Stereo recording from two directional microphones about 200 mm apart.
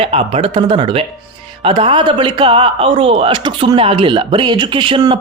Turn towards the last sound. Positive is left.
turn(degrees=-20)  # may be behind; listen again after turning